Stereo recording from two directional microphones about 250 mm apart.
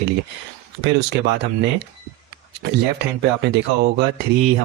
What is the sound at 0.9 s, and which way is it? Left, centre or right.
Speech, right.